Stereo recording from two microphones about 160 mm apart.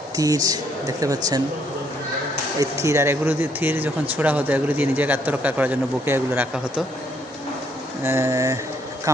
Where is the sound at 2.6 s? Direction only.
20° right (ahead or behind).